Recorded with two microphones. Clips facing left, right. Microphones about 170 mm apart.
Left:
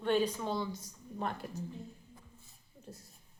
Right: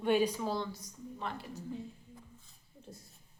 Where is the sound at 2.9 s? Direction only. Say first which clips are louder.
Left 1 dB; centre (ahead or behind).